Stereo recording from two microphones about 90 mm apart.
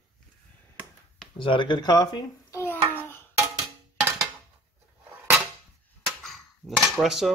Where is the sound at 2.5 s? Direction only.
25° left (ahead or behind).